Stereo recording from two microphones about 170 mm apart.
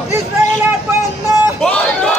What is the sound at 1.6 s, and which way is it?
Run, 5° left (ahead or behind).